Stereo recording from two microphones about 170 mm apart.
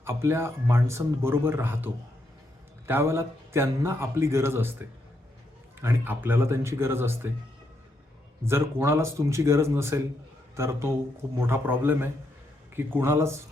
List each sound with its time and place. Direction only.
0.0 s a man's voice: 15° right (ahead or behind)
5.8 s a man's voice: 10° right (ahead or behind)
8.4 s a man's voice: 15° right (ahead or behind)